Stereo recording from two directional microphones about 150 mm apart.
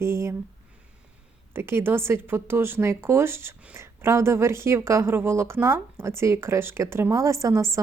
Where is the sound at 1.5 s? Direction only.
15° right (ahead or behind).